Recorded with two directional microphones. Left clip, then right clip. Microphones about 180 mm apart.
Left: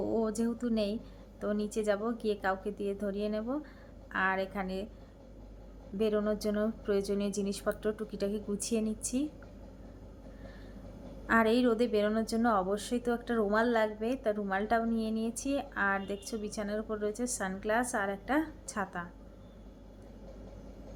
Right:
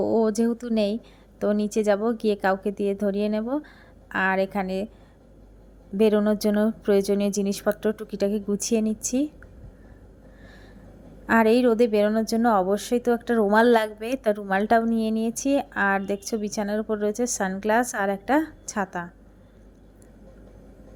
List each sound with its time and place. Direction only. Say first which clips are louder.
0.0 s a woman's voice: right 10 dB; 40° right (ahead or behind)
6.0 s a woman's voice: right 10 dB; 40° right (ahead or behind)
11.3 s a woman's voice: right 8 dB; 35° right (ahead or behind)